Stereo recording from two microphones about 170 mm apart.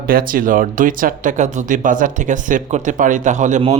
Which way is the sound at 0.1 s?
55° right (ahead or behind).